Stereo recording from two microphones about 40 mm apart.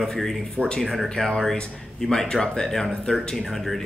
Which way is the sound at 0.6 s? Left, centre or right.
Left.